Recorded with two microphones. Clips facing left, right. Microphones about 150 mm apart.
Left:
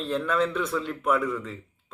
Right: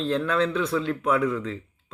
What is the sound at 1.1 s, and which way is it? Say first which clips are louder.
Speech: right 1 dB; 70° right (ahead or behind).